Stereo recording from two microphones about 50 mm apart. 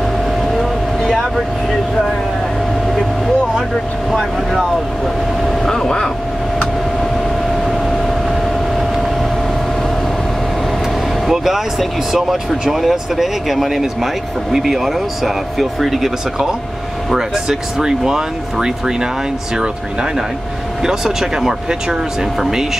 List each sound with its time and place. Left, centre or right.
0.5 s a sound: centre
4.1 s speech: centre
5.7 s speech: centre
7.6 s vehicle: centre
11.2 s speech: centre